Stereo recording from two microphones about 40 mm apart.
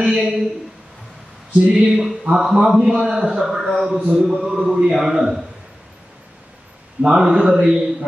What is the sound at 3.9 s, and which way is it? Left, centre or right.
Speech, right.